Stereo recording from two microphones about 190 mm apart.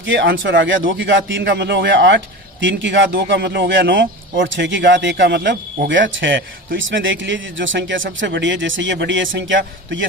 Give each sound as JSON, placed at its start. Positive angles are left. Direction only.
{"t": 0.0, "sound": "speech", "side_deg": -75}